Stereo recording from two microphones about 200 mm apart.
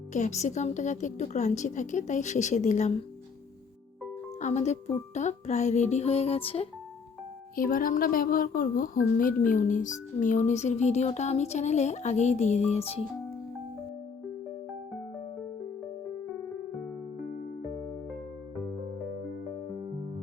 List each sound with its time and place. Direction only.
0.1 s speech: 35° left (ahead or behind)
4.4 s speech: 35° left (ahead or behind)
7.5 s speech: 45° left (ahead or behind)